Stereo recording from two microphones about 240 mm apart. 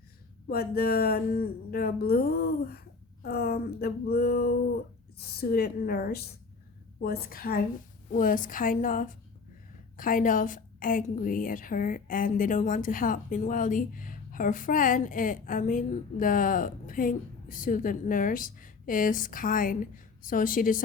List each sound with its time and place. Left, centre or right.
0.4 s a woman's voice: left